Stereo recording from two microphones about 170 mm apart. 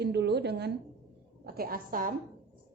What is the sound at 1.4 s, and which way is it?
Speech, 60° right (ahead or behind).